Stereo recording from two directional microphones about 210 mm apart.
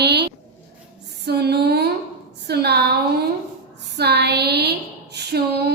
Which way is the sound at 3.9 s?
50° right (ahead or behind).